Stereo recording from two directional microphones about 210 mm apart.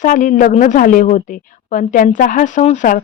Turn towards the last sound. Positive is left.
turn(degrees=40)  # may be behind; listen again after turning